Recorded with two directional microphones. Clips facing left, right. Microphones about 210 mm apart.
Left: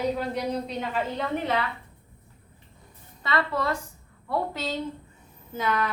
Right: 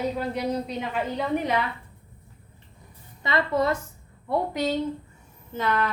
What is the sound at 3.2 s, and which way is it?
A woman's voice, 20° right (ahead or behind).